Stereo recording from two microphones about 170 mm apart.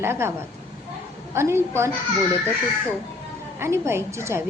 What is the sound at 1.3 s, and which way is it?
Speech, 15° right (ahead or behind).